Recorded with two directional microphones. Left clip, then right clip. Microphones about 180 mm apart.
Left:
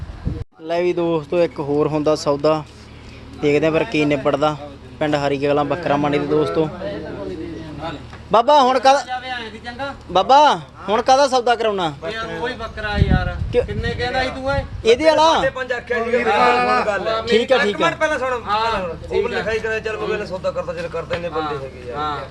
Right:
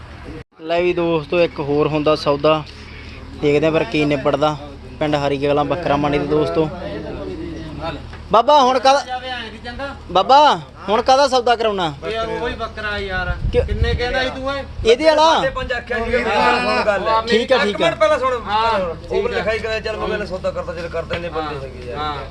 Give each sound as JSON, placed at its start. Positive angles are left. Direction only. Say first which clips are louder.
{"t": 0.7, "sound": "a man's voice", "louder": "right 2 dB", "side_deg": 0}
{"t": 8.3, "sound": "a man's voice", "louder": "right 1 dB", "side_deg": 5}
{"t": 16.4, "sound": "a man's voice", "louder": "left 1 dB", "side_deg": -35}
{"t": 16.9, "sound": "a man's voice", "louder": "right 2 dB", "side_deg": 0}
{"t": 18.4, "sound": "a man's voice", "louder": "right 2 dB", "side_deg": -5}